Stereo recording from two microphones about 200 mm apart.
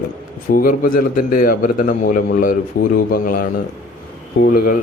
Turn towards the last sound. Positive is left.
turn(degrees=50)  # may be behind; listen again after turning